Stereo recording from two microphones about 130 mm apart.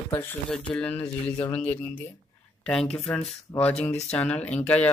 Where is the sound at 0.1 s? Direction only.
15° left (ahead or behind).